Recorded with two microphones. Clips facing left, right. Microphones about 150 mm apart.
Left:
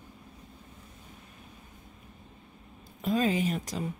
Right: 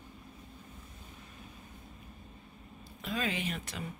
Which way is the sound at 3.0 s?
40° left (ahead or behind).